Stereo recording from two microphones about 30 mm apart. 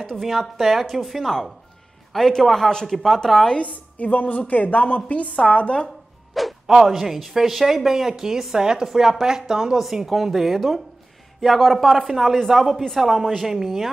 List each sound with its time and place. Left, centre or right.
0.2 s a woman's voice: centre
2.1 s speech: centre
3.0 s speech: centre
3.6 s a woman's voice: left
5.0 s a woman's voice: left
6.4 s music: centre
6.7 s speech: centre
8.5 s a woman's voice: right
9.8 s a woman's voice: centre
13.5 s speech: centre